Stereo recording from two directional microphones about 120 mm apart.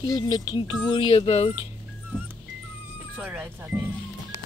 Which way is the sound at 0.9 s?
50° left (ahead or behind).